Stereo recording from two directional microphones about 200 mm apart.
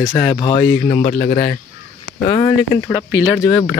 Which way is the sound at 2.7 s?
20° left (ahead or behind).